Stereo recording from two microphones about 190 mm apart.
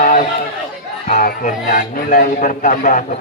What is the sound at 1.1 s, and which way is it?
A man's voice, 45° left (ahead or behind).